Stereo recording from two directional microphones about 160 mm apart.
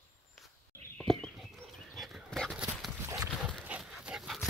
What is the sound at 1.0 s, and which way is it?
Livestock, 5° left (ahead or behind).